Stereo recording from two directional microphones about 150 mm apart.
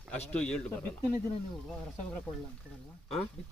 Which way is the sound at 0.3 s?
5° left (ahead or behind).